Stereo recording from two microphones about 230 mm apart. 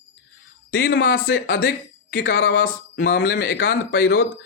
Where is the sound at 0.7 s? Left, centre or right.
Left.